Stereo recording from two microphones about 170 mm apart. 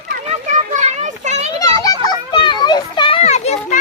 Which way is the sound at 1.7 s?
25° left (ahead or behind).